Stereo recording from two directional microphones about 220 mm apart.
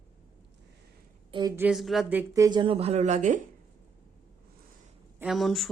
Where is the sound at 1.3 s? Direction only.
15° right (ahead or behind); by 3.4 s 30° right (ahead or behind).